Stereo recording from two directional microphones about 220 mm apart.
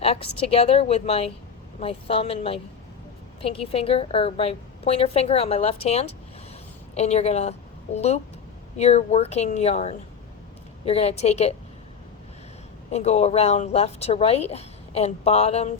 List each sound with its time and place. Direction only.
0.0 s speech: 25° left (ahead or behind)
12.9 s speech: 30° left (ahead or behind)